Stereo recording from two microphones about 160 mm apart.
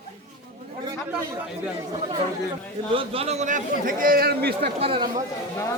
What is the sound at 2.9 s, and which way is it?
A man's voice, 40° right (ahead or behind).